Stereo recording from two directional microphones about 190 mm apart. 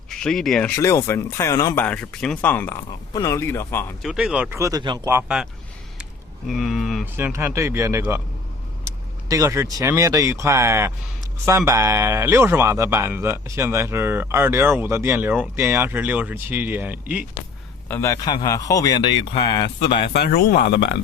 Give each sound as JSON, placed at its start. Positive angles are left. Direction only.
{"t": 0.1, "sound": "speech", "side_deg": 5}
{"t": 0.8, "sound": "speech", "side_deg": 15}
{"t": 4.0, "sound": "speech", "side_deg": -5}
{"t": 6.5, "sound": "speech", "side_deg": 0}
{"t": 7.2, "sound": "speech", "side_deg": -10}
{"t": 9.3, "sound": "speech", "side_deg": -15}
{"t": 17.8, "sound": "a man's voice", "side_deg": 15}
{"t": 20.1, "sound": "speech", "side_deg": 55}